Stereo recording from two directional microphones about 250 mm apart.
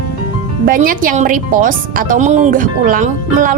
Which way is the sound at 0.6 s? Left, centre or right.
Right.